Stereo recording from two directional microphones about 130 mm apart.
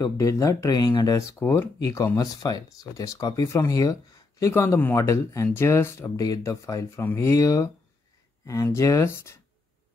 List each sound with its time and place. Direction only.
0.0 s speech: 25° left (ahead or behind)